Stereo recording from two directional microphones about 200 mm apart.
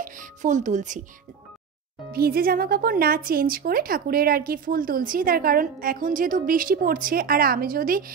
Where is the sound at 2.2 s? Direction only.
50° right (ahead or behind).